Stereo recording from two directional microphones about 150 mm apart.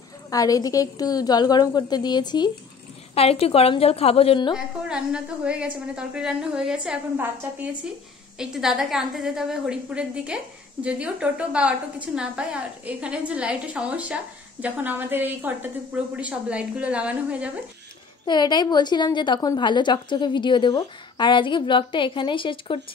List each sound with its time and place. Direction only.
0.3 s a woman's voice: 25° left (ahead or behind)
3.2 s a woman's voice: 40° left (ahead or behind)
4.6 s a woman's voice: 5° right (ahead or behind)
18.2 s a woman's voice: 30° left (ahead or behind)